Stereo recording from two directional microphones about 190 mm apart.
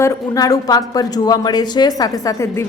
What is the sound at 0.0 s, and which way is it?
A woman's voice, 15° left (ahead or behind).